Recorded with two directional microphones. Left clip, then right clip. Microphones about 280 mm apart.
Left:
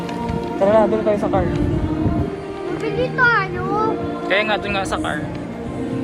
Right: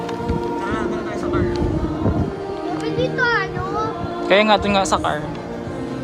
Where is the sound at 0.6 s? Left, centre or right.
Centre.